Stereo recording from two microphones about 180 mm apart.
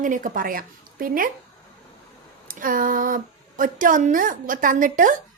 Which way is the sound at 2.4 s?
50° right (ahead or behind).